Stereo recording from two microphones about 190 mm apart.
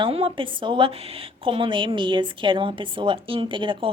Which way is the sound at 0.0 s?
30° right (ahead or behind).